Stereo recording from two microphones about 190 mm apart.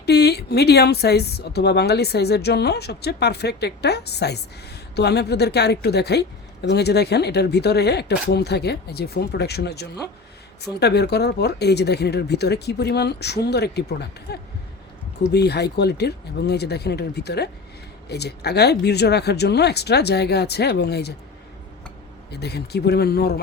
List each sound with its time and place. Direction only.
0.0 s speech: 60° left (ahead or behind)
22.3 s speech: 60° left (ahead or behind)